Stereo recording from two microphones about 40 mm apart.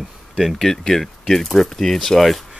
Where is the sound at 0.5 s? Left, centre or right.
Centre.